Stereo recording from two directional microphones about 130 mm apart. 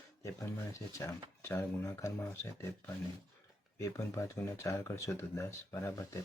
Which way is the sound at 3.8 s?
20° left (ahead or behind).